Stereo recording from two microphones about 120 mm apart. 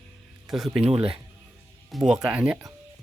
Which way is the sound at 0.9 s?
50° right (ahead or behind).